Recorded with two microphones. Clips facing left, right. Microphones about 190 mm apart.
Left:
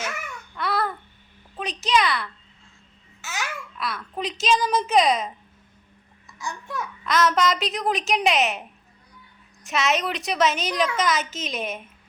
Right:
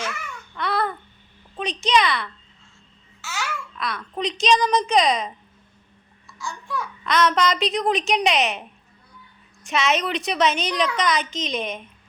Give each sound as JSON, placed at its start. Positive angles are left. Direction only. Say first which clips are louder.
{"t": 0.5, "sound": "babbling", "louder": "right 1 dB", "side_deg": 5}
{"t": 1.5, "sound": "a woman's voice", "louder": "right 2 dB", "side_deg": 5}
{"t": 3.2, "sound": "babbling", "louder": "right 1 dB", "side_deg": 15}
{"t": 3.8, "sound": "a woman's voice", "louder": "right 1 dB", "side_deg": 5}
{"t": 6.2, "sound": "a child's voice", "louder": "even", "side_deg": 20}
{"t": 7.0, "sound": "a woman's voice", "louder": "right 1 dB", "side_deg": 0}
{"t": 9.6, "sound": "a woman's voice", "louder": "right 1 dB", "side_deg": 0}